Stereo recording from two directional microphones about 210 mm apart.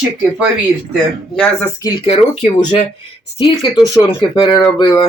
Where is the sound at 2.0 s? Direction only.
30° left (ahead or behind).